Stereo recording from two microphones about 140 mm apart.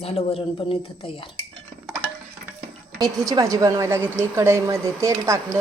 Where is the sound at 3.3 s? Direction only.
25° right (ahead or behind).